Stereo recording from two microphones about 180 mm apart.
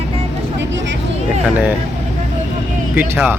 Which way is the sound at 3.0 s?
10° right (ahead or behind).